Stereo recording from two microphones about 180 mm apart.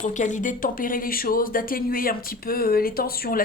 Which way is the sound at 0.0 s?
45° left (ahead or behind).